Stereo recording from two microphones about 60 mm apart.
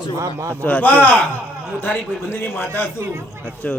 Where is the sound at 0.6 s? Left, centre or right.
Left.